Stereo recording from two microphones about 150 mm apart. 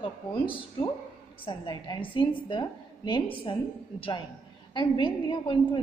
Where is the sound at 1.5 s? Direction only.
30° left (ahead or behind).